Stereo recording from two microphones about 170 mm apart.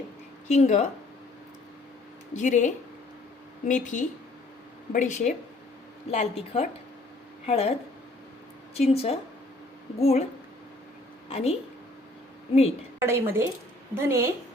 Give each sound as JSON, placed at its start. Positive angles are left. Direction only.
{"t": 0.5, "sound": "speech", "side_deg": 45}
{"t": 2.3, "sound": "a woman's voice", "side_deg": 45}
{"t": 8.7, "sound": "a woman's voice", "side_deg": 35}
{"t": 11.3, "sound": "a woman's voice", "side_deg": 35}
{"t": 13.0, "sound": "speech", "side_deg": -15}